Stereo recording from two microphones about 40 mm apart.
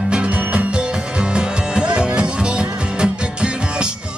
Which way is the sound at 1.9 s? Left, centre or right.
Right.